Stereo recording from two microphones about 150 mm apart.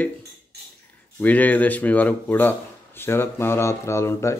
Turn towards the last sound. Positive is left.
turn(degrees=20)  # may be behind; listen again after turning